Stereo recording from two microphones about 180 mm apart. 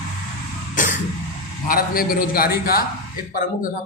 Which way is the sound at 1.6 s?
55° left (ahead or behind).